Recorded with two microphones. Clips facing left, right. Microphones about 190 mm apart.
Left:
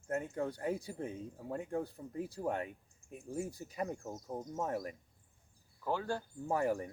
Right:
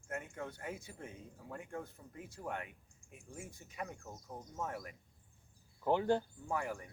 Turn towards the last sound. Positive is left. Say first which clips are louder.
# left 6 dB
turn(degrees=35)  # may be behind; listen again after turning